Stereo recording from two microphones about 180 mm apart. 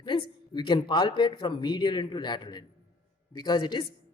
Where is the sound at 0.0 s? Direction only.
25° left (ahead or behind).